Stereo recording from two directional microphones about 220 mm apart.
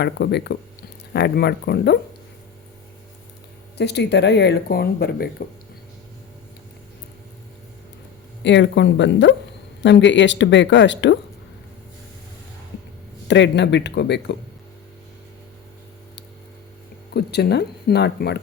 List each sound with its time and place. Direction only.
0.0 s speech: 50° left (ahead or behind)
3.8 s speech: 50° left (ahead or behind)
8.4 s speech: 55° left (ahead or behind)
13.2 s speech: 55° left (ahead or behind)
17.2 s speech: 50° left (ahead or behind)